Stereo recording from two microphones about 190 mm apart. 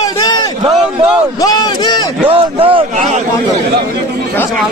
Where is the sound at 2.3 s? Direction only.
30° right (ahead or behind).